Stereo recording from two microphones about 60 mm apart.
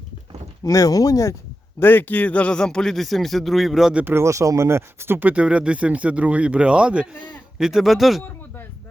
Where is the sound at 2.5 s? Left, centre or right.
Centre.